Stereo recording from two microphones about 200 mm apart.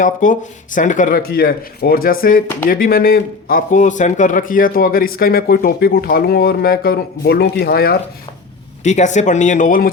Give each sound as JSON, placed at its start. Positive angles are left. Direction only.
{"t": 0.0, "sound": "a man's voice", "side_deg": 40}
{"t": 8.8, "sound": "speech", "side_deg": 35}